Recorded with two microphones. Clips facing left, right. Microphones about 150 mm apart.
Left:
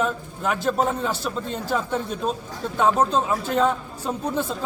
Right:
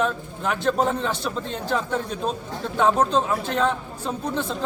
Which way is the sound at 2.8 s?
5° left (ahead or behind).